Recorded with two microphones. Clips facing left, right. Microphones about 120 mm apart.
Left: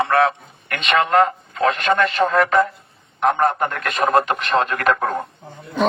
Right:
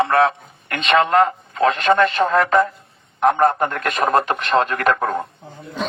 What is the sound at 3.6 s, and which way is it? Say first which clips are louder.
A man's voice: right 1 dB; 35° right (ahead or behind).